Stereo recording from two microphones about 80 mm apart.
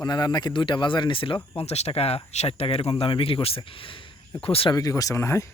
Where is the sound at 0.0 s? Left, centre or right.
Left.